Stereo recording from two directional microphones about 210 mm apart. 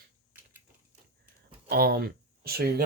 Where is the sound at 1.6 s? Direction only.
45° right (ahead or behind).